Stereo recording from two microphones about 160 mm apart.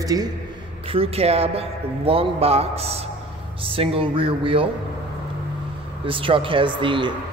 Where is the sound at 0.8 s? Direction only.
35° right (ahead or behind).